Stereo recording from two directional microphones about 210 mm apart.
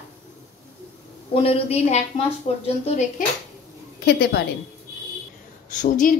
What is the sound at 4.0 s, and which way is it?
Speech, 50° left (ahead or behind).